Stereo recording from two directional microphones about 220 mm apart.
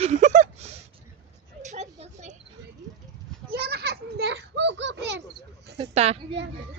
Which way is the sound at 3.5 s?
45° right (ahead or behind).